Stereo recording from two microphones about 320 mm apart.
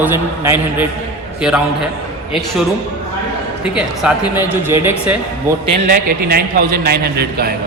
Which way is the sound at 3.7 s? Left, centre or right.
Centre.